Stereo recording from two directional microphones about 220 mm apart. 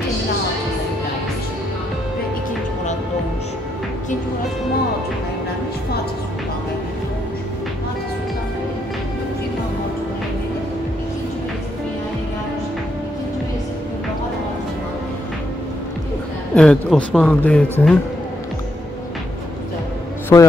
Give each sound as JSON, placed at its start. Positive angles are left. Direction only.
{"t": 16.5, "sound": "speech", "side_deg": 5}
{"t": 20.3, "sound": "a man's voice", "side_deg": 15}